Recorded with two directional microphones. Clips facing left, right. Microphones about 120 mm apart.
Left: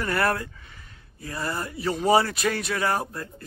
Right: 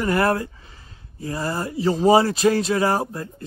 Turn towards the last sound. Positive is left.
turn(degrees=-25)  # may be behind; listen again after turning